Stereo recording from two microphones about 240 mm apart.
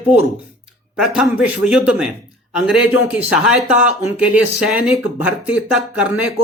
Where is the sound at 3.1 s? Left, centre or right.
Centre.